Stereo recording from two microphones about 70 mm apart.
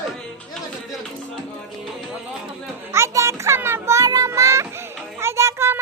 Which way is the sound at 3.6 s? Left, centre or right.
Right.